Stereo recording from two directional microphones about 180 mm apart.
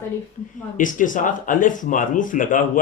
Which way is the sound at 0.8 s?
45° left (ahead or behind).